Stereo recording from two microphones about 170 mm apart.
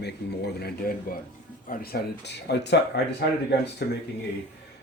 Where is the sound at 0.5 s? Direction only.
65° left (ahead or behind).